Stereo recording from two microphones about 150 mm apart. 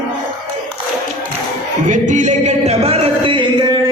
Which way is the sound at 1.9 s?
55° right (ahead or behind).